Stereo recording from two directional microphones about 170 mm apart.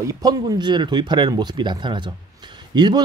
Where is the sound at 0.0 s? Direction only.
20° right (ahead or behind).